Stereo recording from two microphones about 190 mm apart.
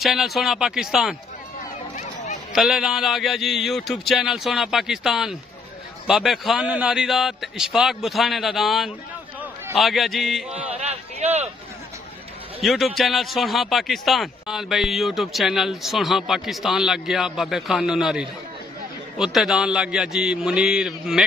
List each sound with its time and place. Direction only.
0.0 s a man's voice: centre (ahead or behind)
2.5 s a man's voice: centre (ahead or behind)
10.8 s a sound: 35° right (ahead or behind)
12.6 s a man's voice: centre (ahead or behind)